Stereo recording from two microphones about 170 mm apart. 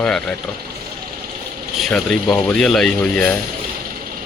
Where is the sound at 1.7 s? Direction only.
5° left (ahead or behind).